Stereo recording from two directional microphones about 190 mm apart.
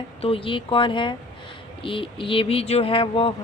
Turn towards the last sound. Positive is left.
turn(degrees=30)  # may be behind; listen again after turning